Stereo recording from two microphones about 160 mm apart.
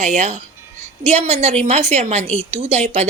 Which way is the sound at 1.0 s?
40° right (ahead or behind).